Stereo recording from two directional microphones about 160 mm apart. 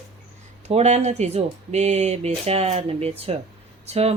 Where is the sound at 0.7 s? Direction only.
45° right (ahead or behind).